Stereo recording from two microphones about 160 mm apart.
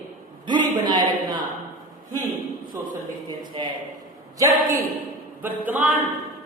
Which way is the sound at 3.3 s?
30° right (ahead or behind).